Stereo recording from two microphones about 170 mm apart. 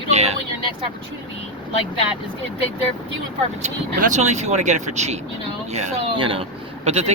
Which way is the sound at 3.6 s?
40° right (ahead or behind).